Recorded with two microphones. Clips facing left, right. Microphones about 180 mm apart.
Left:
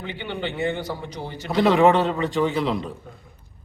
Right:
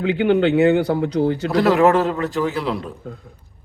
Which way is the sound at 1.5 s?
Centre (ahead or behind).